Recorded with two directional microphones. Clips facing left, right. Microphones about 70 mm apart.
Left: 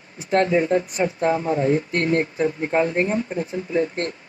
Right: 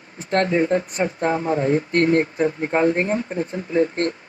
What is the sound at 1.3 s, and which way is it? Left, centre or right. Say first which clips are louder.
Speech: even; right.